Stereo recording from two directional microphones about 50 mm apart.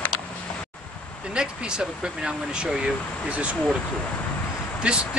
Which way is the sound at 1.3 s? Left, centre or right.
Centre.